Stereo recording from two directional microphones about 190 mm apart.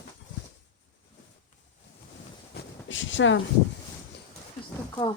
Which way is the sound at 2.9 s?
80° left.